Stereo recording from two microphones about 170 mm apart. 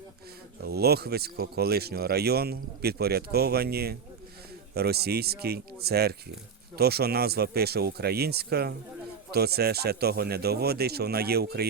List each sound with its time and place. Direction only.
0.6 s speech: 65° right (ahead or behind)